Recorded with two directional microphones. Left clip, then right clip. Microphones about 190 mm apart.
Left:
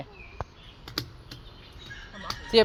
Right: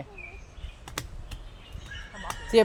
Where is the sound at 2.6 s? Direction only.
15° right (ahead or behind).